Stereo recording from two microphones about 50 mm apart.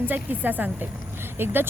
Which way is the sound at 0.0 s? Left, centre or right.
Right.